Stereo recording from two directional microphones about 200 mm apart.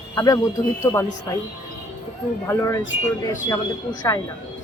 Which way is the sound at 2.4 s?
15° left (ahead or behind).